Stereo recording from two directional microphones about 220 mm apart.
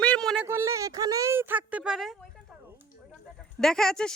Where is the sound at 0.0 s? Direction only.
5° left (ahead or behind).